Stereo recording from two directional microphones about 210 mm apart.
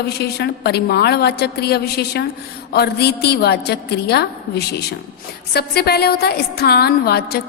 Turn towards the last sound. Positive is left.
turn(degrees=50)  # may be behind; listen again after turning